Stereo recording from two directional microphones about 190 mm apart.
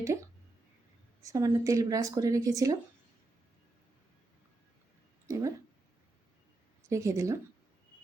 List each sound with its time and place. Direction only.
1.2 s speech: 15° right (ahead or behind)
5.3 s speech: 15° right (ahead or behind)
6.8 s speech: 15° right (ahead or behind)